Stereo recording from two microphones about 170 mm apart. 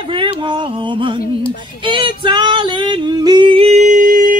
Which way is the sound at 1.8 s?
30° right (ahead or behind).